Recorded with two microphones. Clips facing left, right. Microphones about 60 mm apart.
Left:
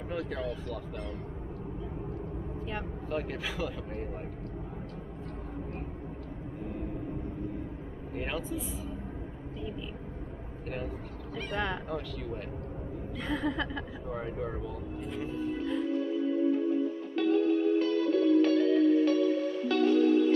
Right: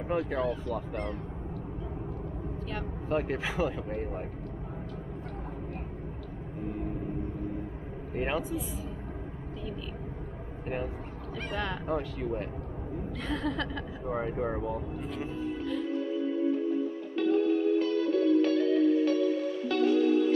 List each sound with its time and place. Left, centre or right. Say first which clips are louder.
0.1 s speech: right 5 dB; right
3.1 s speech: right 5 dB; centre
8.1 s speech: right 4 dB; centre
11.9 s speech: right 5 dB; centre
13.2 s speech: left 1 dB; centre
14.0 s speech: right 6 dB; centre